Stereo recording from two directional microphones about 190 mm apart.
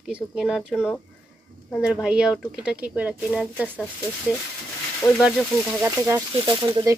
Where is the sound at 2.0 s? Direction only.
5° right (ahead or behind).